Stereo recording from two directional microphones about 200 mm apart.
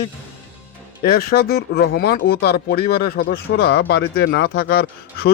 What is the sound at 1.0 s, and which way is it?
Speech, 50° left (ahead or behind).